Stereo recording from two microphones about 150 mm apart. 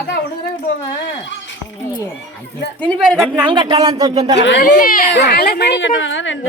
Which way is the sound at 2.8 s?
5° left (ahead or behind).